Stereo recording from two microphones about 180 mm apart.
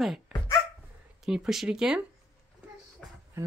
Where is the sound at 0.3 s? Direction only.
5° right (ahead or behind).